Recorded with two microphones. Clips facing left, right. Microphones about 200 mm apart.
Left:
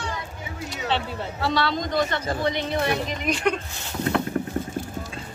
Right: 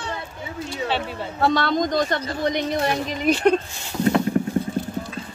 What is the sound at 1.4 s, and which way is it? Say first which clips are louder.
Speech: right 5 dB; 50° right (ahead or behind).